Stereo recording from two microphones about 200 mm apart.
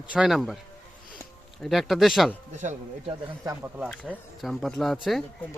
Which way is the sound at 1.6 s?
Centre (ahead or behind).